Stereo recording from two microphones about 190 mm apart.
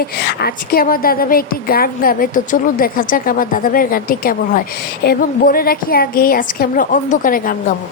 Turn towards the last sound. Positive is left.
turn(degrees=45)  # may be behind; listen again after turning